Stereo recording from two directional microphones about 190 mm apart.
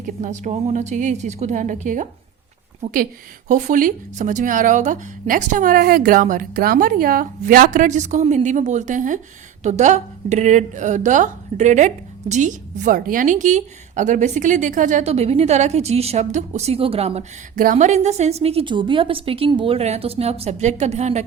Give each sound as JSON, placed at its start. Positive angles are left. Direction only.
{"t": 0.2, "sound": "a woman's voice", "side_deg": -40}
{"t": 17.5, "sound": "a woman's voice", "side_deg": -45}